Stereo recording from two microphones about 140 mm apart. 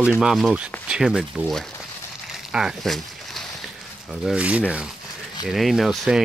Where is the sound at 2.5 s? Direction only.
5° right (ahead or behind).